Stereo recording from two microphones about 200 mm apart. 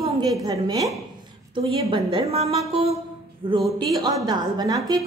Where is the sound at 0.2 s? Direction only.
15° right (ahead or behind).